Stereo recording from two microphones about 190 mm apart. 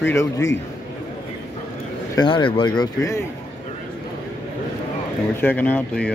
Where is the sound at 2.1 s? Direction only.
25° left (ahead or behind).